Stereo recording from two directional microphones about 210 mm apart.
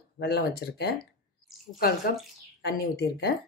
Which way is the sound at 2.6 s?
50° left (ahead or behind).